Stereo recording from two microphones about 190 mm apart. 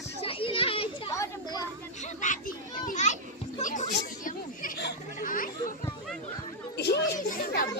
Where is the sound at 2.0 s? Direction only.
40° left (ahead or behind).